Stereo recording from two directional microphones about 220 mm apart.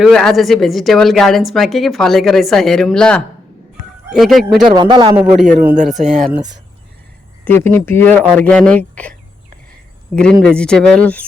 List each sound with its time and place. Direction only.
0.0 s a woman's voice: centre (ahead or behind)
4.7 s a man's voice: 20° right (ahead or behind)
5.1 s a woman's voice: 5° right (ahead or behind)
7.4 s a woman's voice: 10° left (ahead or behind)
10.4 s a woman's voice: 5° left (ahead or behind)